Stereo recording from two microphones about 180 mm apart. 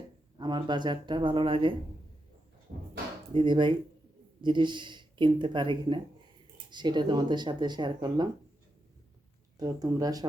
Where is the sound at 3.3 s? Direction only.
25° right (ahead or behind).